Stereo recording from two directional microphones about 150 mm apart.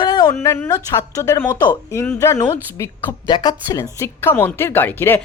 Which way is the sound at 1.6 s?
30° left (ahead or behind).